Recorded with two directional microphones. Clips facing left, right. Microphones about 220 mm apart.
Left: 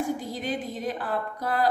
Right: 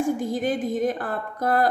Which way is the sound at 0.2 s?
50° right (ahead or behind).